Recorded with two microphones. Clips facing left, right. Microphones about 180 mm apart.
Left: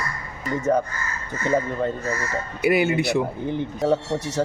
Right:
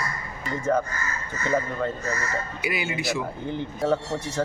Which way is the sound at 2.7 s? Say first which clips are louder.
Left 10 dB; 60° left (ahead or behind).